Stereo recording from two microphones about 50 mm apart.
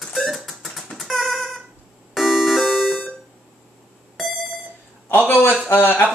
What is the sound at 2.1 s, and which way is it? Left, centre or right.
Music, centre.